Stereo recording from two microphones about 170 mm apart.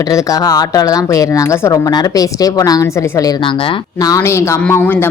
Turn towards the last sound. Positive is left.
turn(degrees=15)  # may be behind; listen again after turning